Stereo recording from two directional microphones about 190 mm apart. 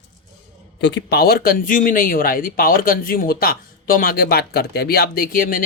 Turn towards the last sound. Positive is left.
turn(degrees=50)  # may be behind; listen again after turning